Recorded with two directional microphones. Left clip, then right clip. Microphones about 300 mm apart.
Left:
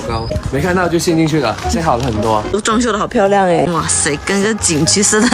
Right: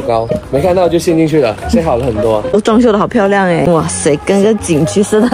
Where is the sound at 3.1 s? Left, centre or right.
Right.